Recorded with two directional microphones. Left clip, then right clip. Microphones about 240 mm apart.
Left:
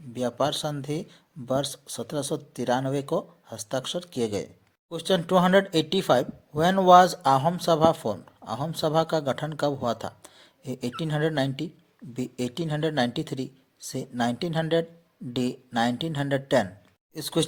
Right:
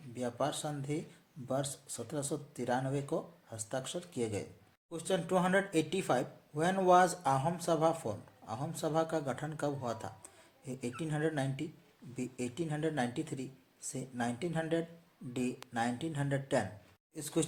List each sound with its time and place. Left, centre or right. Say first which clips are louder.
0.1 s speech: left 10 dB; left